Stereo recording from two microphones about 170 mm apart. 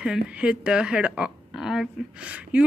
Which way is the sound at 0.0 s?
5° right (ahead or behind).